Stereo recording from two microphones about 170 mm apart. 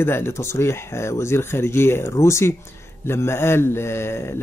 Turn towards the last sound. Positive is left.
turn(degrees=15)  # may be behind; listen again after turning